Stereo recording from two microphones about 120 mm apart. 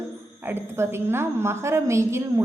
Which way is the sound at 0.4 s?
20° right (ahead or behind).